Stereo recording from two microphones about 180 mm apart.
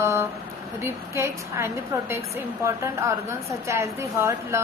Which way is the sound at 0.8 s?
15° right (ahead or behind).